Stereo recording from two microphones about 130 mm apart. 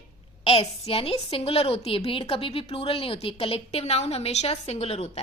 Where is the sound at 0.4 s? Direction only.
50° left (ahead or behind).